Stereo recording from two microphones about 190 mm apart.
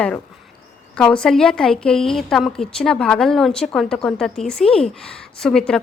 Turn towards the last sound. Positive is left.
turn(degrees=5)  # may be behind; listen again after turning